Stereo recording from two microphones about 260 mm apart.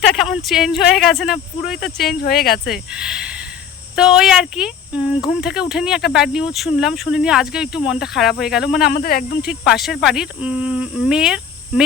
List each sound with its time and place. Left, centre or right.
0.1 s speech: centre
2.2 s speech: left
2.6 s speech: centre
8.9 s speech: left
9.4 s speech: centre